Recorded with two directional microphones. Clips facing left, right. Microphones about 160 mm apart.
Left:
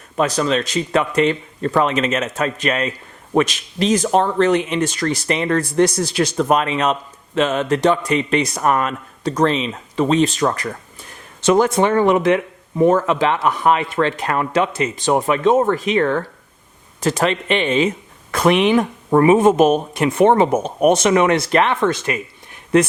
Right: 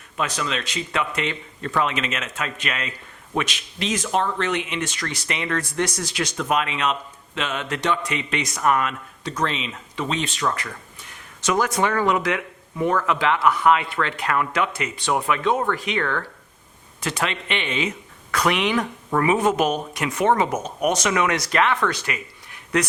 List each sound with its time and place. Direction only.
0.2 s a man's voice: 40° left (ahead or behind)